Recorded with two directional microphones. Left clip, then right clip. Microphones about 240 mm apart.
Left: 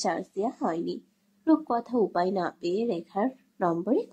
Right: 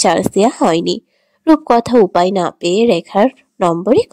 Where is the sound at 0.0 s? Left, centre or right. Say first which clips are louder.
Right 17 dB; right.